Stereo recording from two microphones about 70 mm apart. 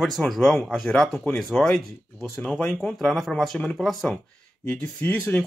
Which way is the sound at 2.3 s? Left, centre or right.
Centre.